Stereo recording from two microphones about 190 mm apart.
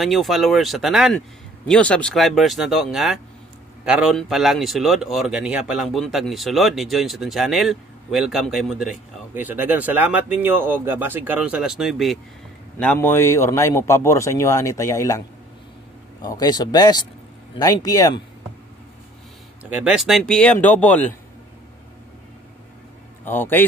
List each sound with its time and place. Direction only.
0.0 s a man's voice: centre (ahead or behind); by 18.2 s 20° left (ahead or behind)
19.6 s speech: 5° right (ahead or behind)
23.2 s a man's voice: 10° left (ahead or behind)